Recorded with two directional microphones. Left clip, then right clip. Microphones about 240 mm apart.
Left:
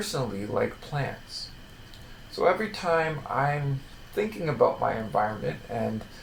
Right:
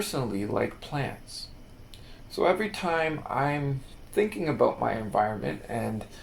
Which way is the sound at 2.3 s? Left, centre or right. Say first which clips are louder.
Left 1 dB; right.